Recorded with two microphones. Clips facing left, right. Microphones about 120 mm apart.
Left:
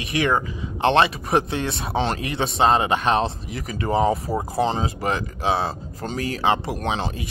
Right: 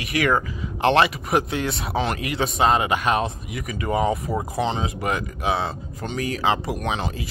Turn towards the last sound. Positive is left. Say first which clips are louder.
# left 1 dB
turn(degrees=30)  # may be behind; listen again after turning